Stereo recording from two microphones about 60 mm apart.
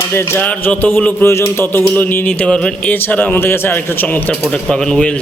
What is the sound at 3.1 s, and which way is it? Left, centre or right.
Speech, left.